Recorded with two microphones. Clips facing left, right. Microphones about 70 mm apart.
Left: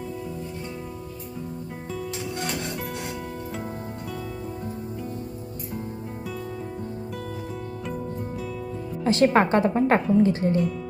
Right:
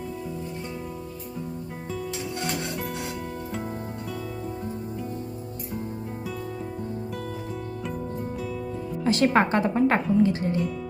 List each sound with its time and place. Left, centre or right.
9.0 s speech: left